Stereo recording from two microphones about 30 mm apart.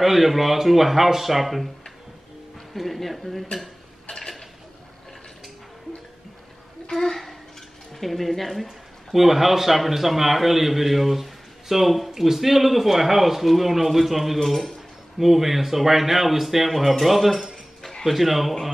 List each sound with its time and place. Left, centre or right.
0.0 s speech: centre
2.7 s speech: centre
6.9 s a child's voice: centre
7.9 s speech: centre
8.6 s speech: centre